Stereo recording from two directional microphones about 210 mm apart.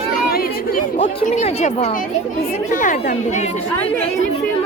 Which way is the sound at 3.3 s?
35° left (ahead or behind).